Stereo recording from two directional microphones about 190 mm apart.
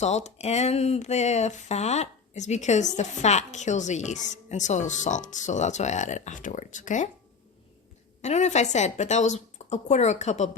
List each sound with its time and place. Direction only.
0.0 s speech: 35° left (ahead or behind)
8.2 s speech: 35° left (ahead or behind)